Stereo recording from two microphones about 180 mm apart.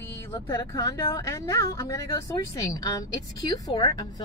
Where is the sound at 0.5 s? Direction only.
20° left (ahead or behind).